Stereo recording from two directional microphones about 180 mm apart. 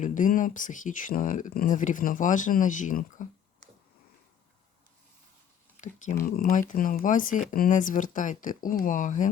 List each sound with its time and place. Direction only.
0.0 s speech: 45° left (ahead or behind)
5.7 s speech: 40° left (ahead or behind)